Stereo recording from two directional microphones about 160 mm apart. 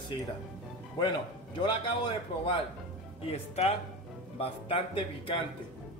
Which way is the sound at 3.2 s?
40° left (ahead or behind).